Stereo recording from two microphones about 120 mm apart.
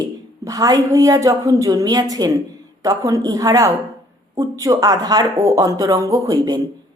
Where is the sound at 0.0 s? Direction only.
30° right (ahead or behind).